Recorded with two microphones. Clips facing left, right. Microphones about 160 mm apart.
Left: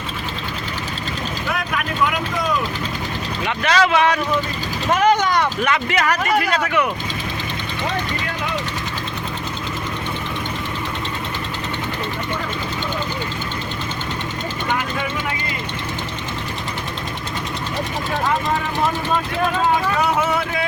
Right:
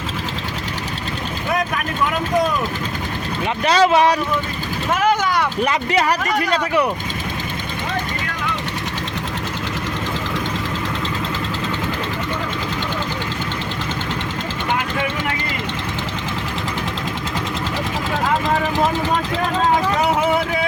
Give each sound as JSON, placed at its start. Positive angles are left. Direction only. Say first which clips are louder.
{"t": 3.6, "sound": "speech", "louder": "right 3 dB", "side_deg": -35}
{"t": 4.9, "sound": "vehicle", "louder": "left 2 dB", "side_deg": -5}
{"t": 5.6, "sound": "speech", "louder": "right 1 dB", "side_deg": -35}